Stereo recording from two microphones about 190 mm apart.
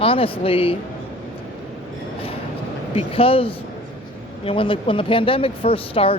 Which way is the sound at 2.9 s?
30° left (ahead or behind).